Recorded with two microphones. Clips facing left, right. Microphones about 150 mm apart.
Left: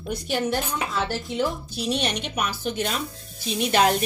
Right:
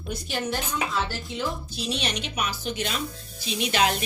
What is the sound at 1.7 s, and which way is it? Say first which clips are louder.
Speech: left 4 dB; 55° left (ahead or behind).